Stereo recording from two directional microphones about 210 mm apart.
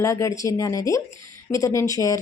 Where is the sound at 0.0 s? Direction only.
15° left (ahead or behind).